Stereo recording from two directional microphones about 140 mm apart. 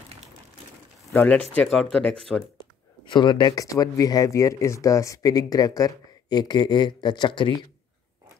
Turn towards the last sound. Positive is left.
turn(degrees=35)  # may be behind; listen again after turning